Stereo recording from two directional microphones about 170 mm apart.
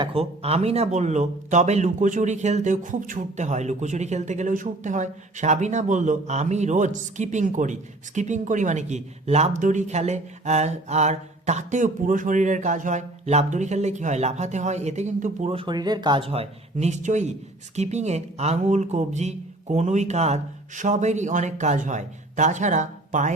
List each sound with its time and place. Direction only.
0.0 s speech: 35° right (ahead or behind)